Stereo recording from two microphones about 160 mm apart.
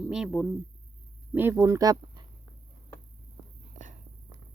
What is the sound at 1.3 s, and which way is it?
Speech, 15° right (ahead or behind).